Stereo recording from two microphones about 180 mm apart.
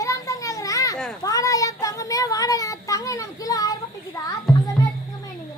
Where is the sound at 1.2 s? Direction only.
20° left (ahead or behind).